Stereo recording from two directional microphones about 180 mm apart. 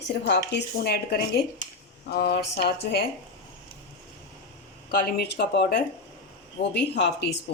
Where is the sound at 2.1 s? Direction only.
60° left (ahead or behind).